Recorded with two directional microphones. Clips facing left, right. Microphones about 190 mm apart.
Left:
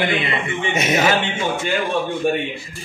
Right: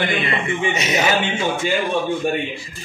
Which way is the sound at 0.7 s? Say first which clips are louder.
Left 2 dB; 50° left (ahead or behind).